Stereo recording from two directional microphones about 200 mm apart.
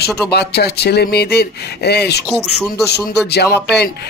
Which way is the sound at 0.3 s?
55° left (ahead or behind).